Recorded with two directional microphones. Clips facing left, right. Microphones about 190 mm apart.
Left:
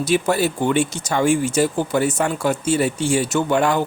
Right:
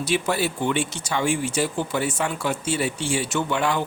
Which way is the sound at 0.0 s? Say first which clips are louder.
Left 5 dB; 45° left (ahead or behind).